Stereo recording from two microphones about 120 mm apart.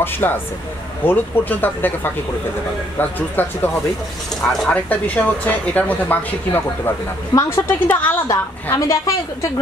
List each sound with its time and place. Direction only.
0.0 s speech: 15° left (ahead or behind)
3.0 s a woman's voice: 15° left (ahead or behind)
8.7 s a woman's voice: 25° left (ahead or behind)